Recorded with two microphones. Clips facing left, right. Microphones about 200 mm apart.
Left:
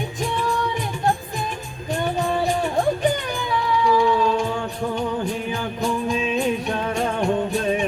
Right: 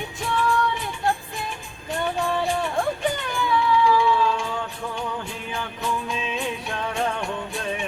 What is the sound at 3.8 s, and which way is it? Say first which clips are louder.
Music: left 2 dB; 40° left (ahead or behind).